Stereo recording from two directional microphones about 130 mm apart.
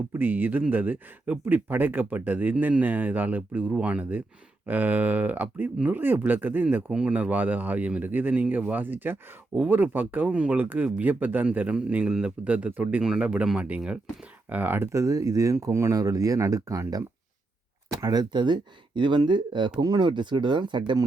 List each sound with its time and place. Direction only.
0.1 s speech: 15° right (ahead or behind); by 21.0 s 35° right (ahead or behind)